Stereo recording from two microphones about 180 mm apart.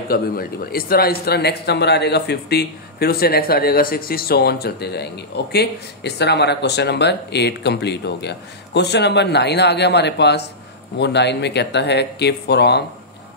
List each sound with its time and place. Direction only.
0.1 s a man's voice: 55° left (ahead or behind)